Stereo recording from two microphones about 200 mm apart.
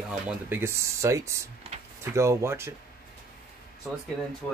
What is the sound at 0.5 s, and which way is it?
Speech, 10° right (ahead or behind).